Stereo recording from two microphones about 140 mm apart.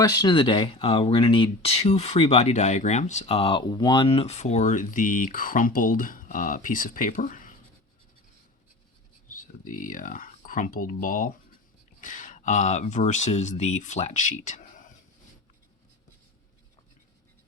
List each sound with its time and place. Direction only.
0.0 s speech: 30° left (ahead or behind); by 7.5 s 75° left (ahead or behind)
9.3 s speech: 70° left (ahead or behind)